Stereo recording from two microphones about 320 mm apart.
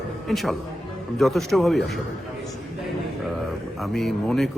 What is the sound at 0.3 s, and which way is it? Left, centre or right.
Speech, centre.